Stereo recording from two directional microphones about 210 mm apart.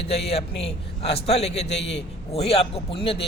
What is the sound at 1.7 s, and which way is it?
Speech, 55° left (ahead or behind).